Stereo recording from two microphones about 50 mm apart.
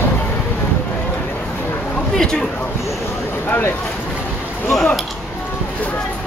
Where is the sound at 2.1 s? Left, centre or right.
Centre.